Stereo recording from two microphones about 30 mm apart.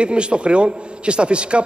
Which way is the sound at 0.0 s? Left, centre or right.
Right.